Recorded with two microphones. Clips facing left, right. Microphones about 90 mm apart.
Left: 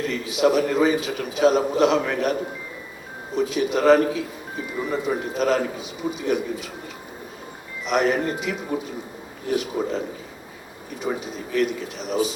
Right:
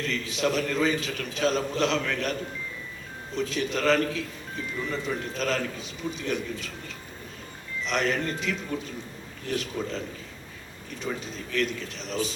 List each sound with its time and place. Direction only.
0.0 s a man's voice: 15° left (ahead or behind)
7.9 s a man's voice: 15° left (ahead or behind)